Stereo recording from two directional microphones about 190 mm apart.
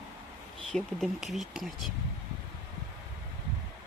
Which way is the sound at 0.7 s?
Centre (ahead or behind).